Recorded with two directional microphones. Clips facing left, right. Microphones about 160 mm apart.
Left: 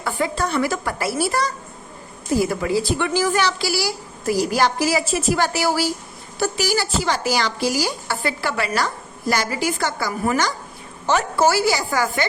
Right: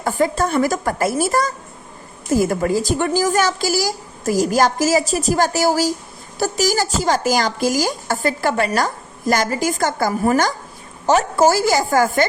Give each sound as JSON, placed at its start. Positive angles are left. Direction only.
{"t": 0.0, "sound": "a woman's voice", "side_deg": -45}